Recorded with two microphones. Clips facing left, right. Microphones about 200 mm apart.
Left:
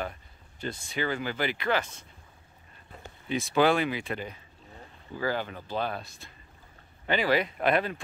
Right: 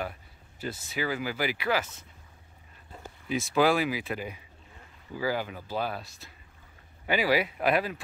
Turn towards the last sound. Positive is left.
turn(degrees=-5)  # may be behind; listen again after turning